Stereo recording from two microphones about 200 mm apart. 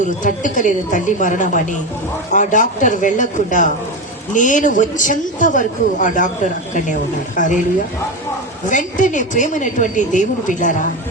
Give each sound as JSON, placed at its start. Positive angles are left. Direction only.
{"t": 0.0, "sound": "a woman's voice", "side_deg": 40}
{"t": 8.6, "sound": "a woman's voice", "side_deg": 40}